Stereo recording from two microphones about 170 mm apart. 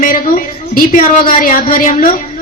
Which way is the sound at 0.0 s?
55° left (ahead or behind).